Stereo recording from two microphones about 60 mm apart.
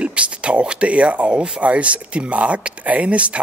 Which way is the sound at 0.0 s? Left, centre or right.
Centre.